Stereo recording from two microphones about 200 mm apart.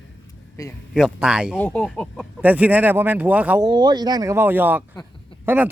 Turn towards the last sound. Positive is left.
turn(degrees=-10)  # may be behind; listen again after turning